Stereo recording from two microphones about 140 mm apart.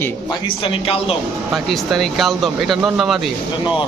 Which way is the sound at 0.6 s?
40° left (ahead or behind).